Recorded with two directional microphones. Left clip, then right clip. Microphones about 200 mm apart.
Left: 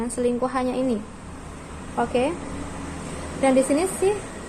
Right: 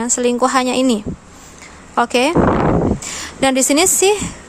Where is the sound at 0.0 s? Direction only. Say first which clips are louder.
Right 8 dB; 35° right (ahead or behind).